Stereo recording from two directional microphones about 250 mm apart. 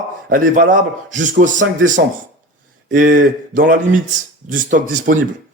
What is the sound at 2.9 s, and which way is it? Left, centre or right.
A man's voice, right.